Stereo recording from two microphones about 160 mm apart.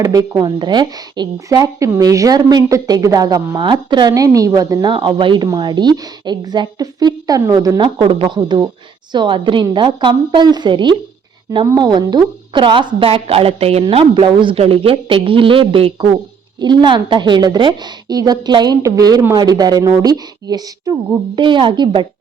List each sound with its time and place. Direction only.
0.0 s a woman's voice: 20° right (ahead or behind)